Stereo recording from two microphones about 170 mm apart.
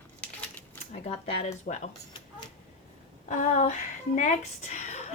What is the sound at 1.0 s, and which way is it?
Speech, 40° left (ahead or behind).